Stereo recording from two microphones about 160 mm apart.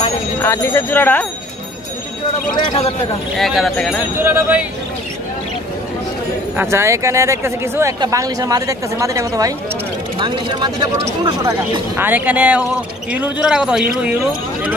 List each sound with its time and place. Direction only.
0.4 s speech: 15° left (ahead or behind)
2.6 s a man's voice: 35° left (ahead or behind)
3.3 s speech: centre (ahead or behind)
4.2 s speech: 15° right (ahead or behind)
6.5 s a woman's voice: 15° right (ahead or behind)
12.0 s speech: 10° right (ahead or behind)